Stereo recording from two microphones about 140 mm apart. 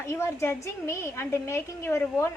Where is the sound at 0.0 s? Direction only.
20° left (ahead or behind).